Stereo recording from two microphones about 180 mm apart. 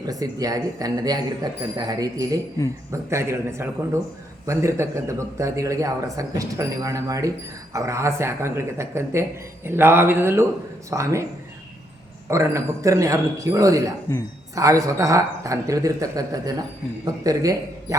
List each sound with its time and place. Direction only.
0.0 s speech: 20° right (ahead or behind)
12.3 s speech: 15° right (ahead or behind)